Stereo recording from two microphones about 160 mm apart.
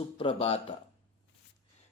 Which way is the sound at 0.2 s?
35° left (ahead or behind).